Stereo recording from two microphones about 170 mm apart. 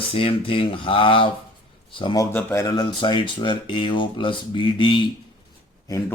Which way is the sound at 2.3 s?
15° left (ahead or behind).